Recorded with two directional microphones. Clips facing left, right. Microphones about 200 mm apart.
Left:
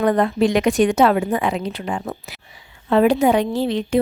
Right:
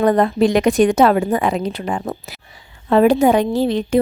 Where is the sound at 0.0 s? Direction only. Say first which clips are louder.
Right 3 dB; 40° right (ahead or behind).